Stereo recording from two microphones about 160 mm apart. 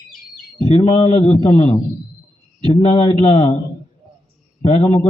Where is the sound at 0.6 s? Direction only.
40° left (ahead or behind).